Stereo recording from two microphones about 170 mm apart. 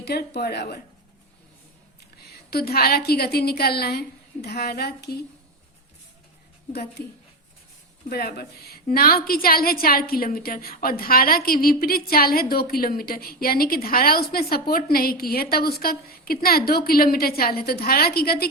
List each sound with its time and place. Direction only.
0.0 s a woman's voice: 70° left (ahead or behind)
2.5 s a woman's voice: 65° left (ahead or behind)
7.0 s a woman's voice: 70° left (ahead or behind)